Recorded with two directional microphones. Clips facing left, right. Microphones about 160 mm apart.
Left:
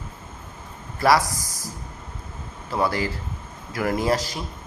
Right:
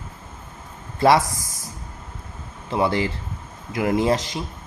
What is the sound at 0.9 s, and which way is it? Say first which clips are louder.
Speech: right 2 dB; 25° right (ahead or behind).